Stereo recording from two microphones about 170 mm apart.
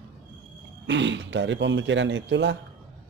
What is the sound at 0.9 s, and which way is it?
Speech, 90° right.